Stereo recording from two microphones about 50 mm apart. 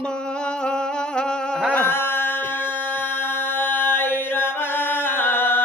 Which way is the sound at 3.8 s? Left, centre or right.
Left.